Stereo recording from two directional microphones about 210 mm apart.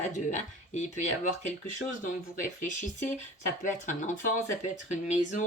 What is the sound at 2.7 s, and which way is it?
Speech, 35° left (ahead or behind).